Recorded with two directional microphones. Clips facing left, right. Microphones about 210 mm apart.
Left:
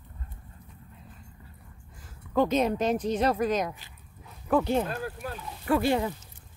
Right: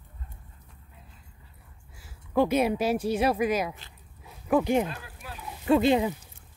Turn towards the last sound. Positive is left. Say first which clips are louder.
# right 3 dB
turn(degrees=-20)  # may be behind; listen again after turning